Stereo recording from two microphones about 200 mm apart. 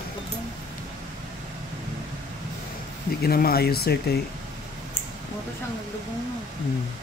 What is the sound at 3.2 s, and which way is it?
Speech, 50° left (ahead or behind).